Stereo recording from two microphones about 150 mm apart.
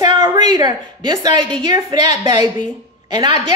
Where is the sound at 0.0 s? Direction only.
30° right (ahead or behind).